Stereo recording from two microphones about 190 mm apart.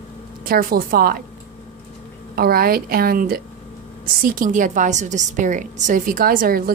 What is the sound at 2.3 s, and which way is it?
A woman's voice, 50° right (ahead or behind).